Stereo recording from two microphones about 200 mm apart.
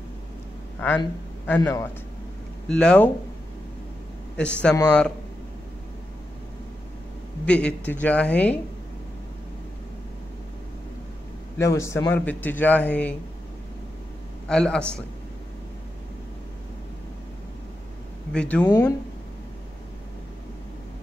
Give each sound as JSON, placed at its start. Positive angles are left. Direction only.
{"t": 0.7, "sound": "a man's voice", "side_deg": 10}
{"t": 2.7, "sound": "a man's voice", "side_deg": 5}
{"t": 4.4, "sound": "a man's voice", "side_deg": 5}
{"t": 7.4, "sound": "a man's voice", "side_deg": 5}
{"t": 11.5, "sound": "a man's voice", "side_deg": 15}
{"t": 14.5, "sound": "a man's voice", "side_deg": 5}
{"t": 18.3, "sound": "a man's voice", "side_deg": 5}
{"t": 18.7, "sound": "a man's voice", "side_deg": 15}